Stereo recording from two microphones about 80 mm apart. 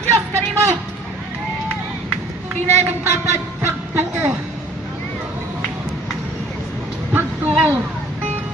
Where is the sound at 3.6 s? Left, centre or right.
Right.